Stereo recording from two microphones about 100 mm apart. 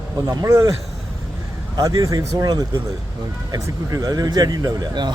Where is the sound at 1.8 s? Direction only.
40° right (ahead or behind).